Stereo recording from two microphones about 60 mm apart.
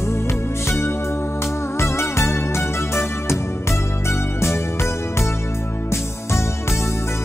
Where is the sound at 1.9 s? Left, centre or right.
Left.